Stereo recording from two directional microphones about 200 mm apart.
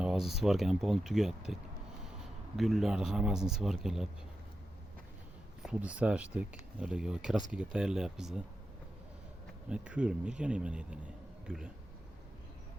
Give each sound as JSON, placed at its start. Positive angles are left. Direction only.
{"t": 0.0, "sound": "speech", "side_deg": 0}
{"t": 2.6, "sound": "speech", "side_deg": 0}
{"t": 5.6, "sound": "speech", "side_deg": -5}
{"t": 9.6, "sound": "speech", "side_deg": -5}